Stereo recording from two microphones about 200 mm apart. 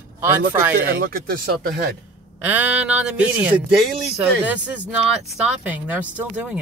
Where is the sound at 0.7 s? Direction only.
50° right (ahead or behind).